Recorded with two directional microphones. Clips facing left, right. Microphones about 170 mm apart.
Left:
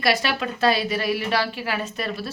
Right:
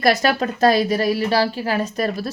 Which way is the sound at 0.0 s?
45° right (ahead or behind).